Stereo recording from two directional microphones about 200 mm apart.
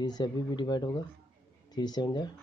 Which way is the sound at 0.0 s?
20° left (ahead or behind).